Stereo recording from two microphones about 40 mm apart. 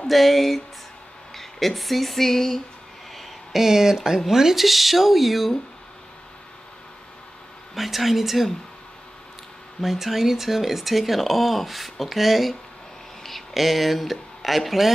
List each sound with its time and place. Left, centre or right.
0.0 s speech: centre
1.3 s a sound: centre
3.2 s speech: centre
7.7 s speech: centre
9.8 s speech: centre